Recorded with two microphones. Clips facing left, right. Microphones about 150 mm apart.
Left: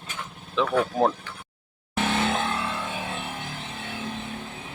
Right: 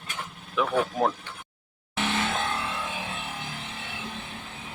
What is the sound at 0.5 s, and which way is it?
Speech, 25° left (ahead or behind).